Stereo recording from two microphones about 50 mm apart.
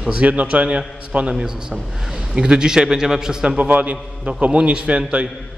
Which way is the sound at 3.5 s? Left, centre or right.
Right.